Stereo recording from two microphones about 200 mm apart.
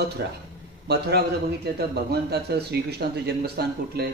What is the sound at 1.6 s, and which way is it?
Speech, 55° right (ahead or behind).